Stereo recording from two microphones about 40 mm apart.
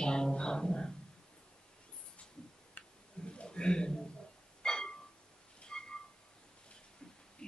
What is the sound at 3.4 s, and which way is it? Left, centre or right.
Speech, left.